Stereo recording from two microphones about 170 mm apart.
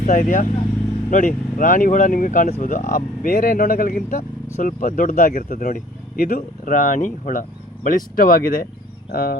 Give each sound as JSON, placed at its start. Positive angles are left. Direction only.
{"t": 0.0, "sound": "speech", "side_deg": 50}